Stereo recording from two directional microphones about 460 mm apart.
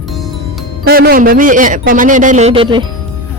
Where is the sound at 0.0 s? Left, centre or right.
Centre.